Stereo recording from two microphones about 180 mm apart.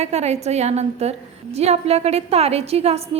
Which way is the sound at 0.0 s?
40° right (ahead or behind).